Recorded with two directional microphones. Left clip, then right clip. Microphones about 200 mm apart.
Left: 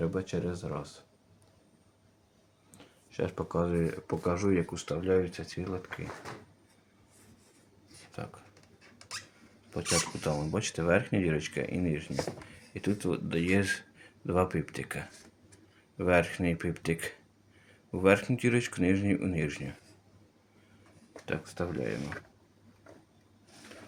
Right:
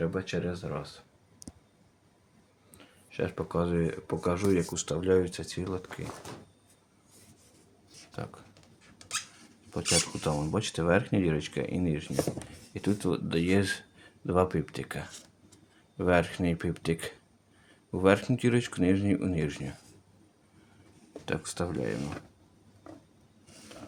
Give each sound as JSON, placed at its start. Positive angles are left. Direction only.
{"t": 0.0, "sound": "speech", "side_deg": 0}
{"t": 2.7, "sound": "speech", "side_deg": 0}
{"t": 8.1, "sound": "speech", "side_deg": -15}
{"t": 9.7, "sound": "speech", "side_deg": -10}
{"t": 21.2, "sound": "speech", "side_deg": -15}